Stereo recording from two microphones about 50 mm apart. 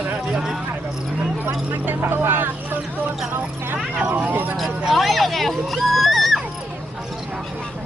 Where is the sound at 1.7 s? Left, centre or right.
Right.